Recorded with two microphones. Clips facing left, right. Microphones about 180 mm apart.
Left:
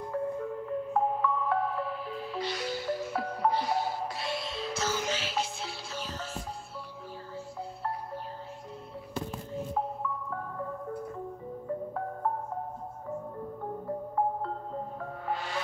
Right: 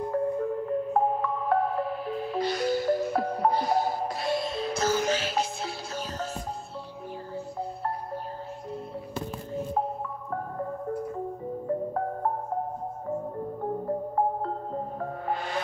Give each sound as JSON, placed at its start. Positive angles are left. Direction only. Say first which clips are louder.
{"t": 0.1, "sound": "music", "louder": "right 4 dB", "side_deg": -45}
{"t": 11.6, "sound": "marimba", "louder": "right 5 dB", "side_deg": -45}
{"t": 13.8, "sound": "music", "louder": "right 2 dB", "side_deg": -45}